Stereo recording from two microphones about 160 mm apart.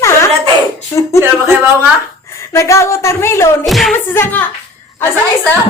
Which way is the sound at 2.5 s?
20° left (ahead or behind).